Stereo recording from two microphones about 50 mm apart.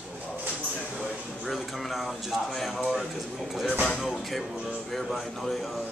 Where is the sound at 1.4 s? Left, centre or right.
Centre.